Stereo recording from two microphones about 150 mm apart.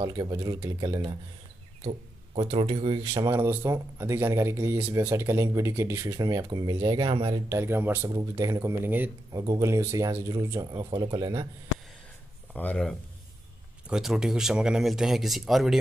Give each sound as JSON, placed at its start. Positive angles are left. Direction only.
{"t": 0.0, "sound": "speech", "side_deg": -25}
{"t": 3.3, "sound": "speech", "side_deg": -15}
{"t": 7.4, "sound": "speech", "side_deg": -15}
{"t": 9.3, "sound": "speech", "side_deg": -25}
{"t": 12.5, "sound": "speech", "side_deg": 5}
{"t": 13.8, "sound": "speech", "side_deg": -5}